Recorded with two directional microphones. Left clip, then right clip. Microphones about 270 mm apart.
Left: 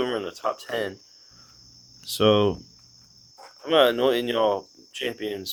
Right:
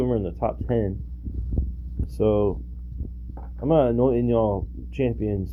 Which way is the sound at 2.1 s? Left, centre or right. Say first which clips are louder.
Left 2 dB; centre.